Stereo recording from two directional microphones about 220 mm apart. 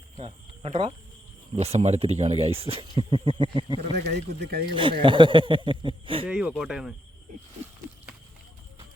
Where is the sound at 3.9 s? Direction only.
50° right (ahead or behind).